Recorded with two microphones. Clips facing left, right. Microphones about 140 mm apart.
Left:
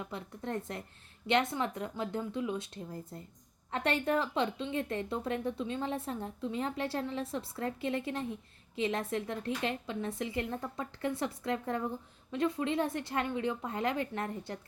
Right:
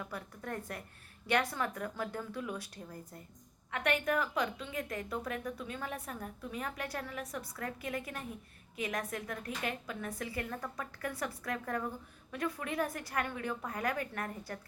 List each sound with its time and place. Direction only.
0.0 s a woman's voice: 25° left (ahead or behind)